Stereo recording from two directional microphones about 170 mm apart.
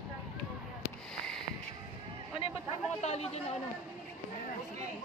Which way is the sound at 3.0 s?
40° left (ahead or behind).